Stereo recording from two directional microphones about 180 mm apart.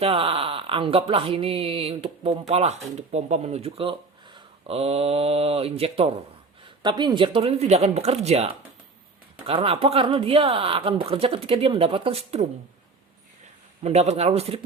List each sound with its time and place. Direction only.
0.0 s speech: 30° right (ahead or behind)
13.8 s speech: 35° right (ahead or behind)